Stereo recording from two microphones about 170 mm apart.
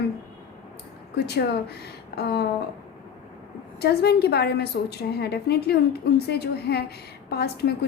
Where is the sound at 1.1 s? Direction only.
70° left (ahead or behind).